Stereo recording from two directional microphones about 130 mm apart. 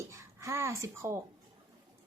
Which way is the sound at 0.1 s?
20° right (ahead or behind).